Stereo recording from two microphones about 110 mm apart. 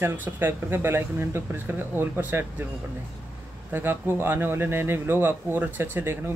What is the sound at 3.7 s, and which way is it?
Speech, 20° right (ahead or behind).